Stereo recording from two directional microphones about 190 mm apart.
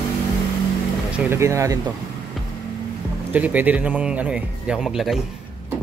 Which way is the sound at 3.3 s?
10° right (ahead or behind).